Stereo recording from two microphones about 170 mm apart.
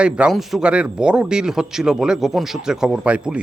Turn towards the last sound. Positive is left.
turn(degrees=-5)  # may be behind; listen again after turning